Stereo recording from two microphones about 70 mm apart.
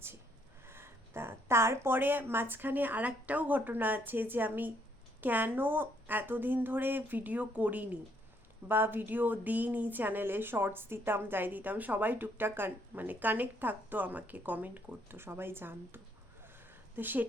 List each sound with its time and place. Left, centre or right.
0.7 s speech: right